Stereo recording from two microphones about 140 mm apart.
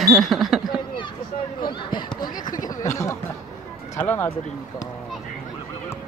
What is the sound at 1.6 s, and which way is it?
Speech, 35° left (ahead or behind).